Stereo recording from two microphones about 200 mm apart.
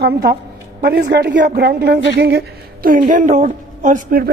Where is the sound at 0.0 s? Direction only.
50° right (ahead or behind).